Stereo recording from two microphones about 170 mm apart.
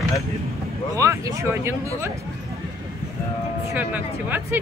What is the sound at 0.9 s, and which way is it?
Speech, 20° right (ahead or behind).